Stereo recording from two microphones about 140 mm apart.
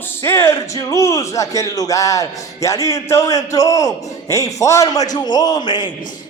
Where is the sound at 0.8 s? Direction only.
25° left (ahead or behind).